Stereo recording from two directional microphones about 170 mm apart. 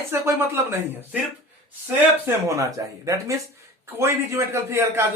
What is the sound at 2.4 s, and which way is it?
Speech, 20° right (ahead or behind).